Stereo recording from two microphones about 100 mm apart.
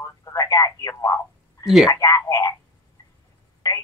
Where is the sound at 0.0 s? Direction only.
35° left (ahead or behind).